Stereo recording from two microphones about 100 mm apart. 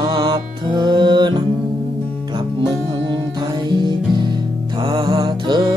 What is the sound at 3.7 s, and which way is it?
Music, 45° right (ahead or behind).